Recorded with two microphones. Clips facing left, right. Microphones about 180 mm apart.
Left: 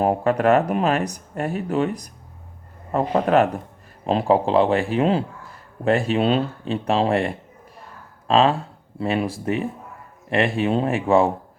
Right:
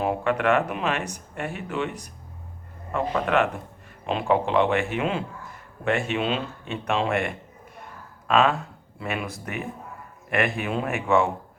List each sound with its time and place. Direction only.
0.0 s speech: 40° left (ahead or behind)